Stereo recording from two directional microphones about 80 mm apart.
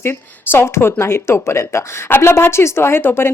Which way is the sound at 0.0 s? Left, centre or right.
Left.